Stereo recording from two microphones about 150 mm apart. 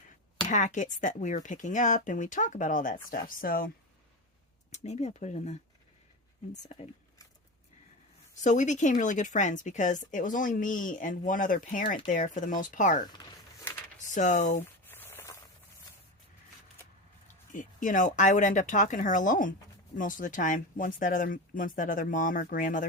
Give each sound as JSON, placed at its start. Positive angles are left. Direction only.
{"t": 0.4, "sound": "speech", "side_deg": 55}
{"t": 4.8, "sound": "speech", "side_deg": 50}
{"t": 6.7, "sound": "speech", "side_deg": 50}
{"t": 8.4, "sound": "speech", "side_deg": 55}
{"t": 14.0, "sound": "speech", "side_deg": 55}
{"t": 14.8, "sound": "a sound", "side_deg": 15}
{"t": 17.5, "sound": "speech", "side_deg": 60}